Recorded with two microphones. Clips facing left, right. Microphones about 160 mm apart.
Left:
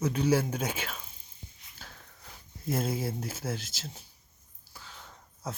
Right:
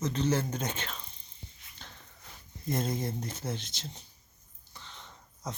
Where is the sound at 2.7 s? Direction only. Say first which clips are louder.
Left 1 dB; 5° left (ahead or behind).